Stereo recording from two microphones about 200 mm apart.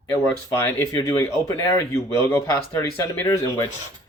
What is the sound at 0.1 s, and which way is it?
Speech, 10° left (ahead or behind).